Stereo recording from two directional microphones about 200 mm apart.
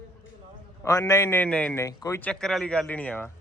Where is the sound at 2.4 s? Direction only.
Centre (ahead or behind).